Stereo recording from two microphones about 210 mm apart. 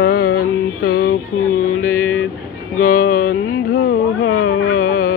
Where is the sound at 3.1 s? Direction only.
45° left (ahead or behind).